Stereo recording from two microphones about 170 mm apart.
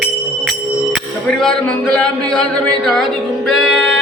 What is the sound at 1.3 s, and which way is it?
Music, 5° left (ahead or behind).